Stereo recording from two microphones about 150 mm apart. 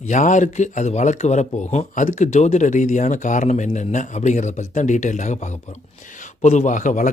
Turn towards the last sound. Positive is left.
turn(degrees=55)  # may be behind; listen again after turning